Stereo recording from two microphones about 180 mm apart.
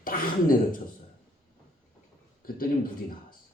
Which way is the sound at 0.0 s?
50° left (ahead or behind).